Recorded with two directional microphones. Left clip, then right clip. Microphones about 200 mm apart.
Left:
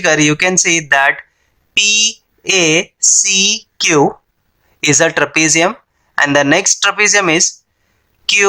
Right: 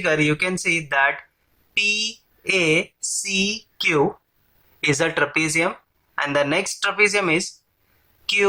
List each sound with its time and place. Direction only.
0.0 s speech: 40° left (ahead or behind)